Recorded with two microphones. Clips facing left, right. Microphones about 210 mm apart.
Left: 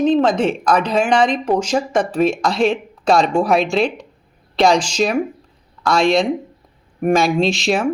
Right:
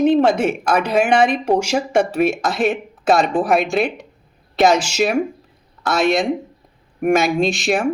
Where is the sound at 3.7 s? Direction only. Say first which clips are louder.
Left 1 dB; 55° right (ahead or behind).